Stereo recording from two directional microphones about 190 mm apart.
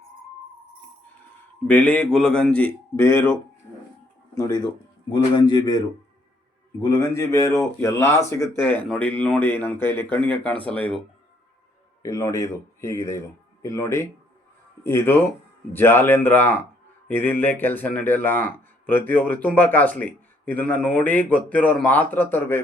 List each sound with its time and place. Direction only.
1.6 s speech: 10° left (ahead or behind)
4.4 s speech: 20° left (ahead or behind)
6.8 s speech: 15° left (ahead or behind)
12.0 s speech: 15° left (ahead or behind)